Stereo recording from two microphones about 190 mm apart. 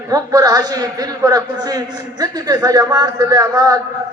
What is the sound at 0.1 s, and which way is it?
A man's voice, 20° right (ahead or behind).